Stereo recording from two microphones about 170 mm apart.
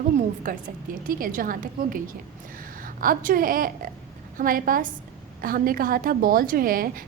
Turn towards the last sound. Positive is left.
turn(degrees=-55)  # may be behind; listen again after turning